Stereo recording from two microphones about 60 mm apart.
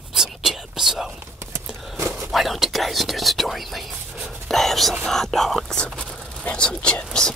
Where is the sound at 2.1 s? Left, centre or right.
Centre.